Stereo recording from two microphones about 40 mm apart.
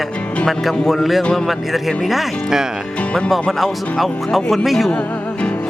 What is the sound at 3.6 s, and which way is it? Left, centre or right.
Speech, centre.